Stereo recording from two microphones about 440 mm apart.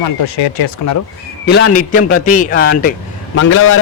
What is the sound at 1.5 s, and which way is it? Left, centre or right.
A man's voice, left.